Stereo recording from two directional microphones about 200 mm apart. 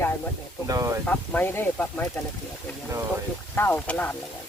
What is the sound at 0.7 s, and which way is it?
Speech, 15° right (ahead or behind).